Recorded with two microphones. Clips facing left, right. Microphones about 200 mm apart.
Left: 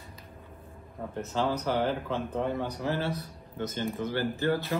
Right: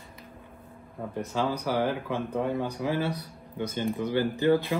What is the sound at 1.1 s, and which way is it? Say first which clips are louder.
Speech: even; 15° right (ahead or behind).